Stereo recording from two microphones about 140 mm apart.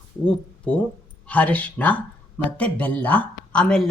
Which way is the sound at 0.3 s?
10° left (ahead or behind).